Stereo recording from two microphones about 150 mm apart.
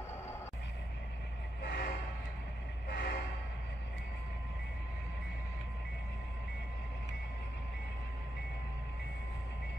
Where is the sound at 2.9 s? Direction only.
90° left.